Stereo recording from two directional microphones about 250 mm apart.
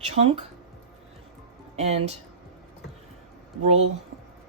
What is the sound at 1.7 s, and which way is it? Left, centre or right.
Speech, right.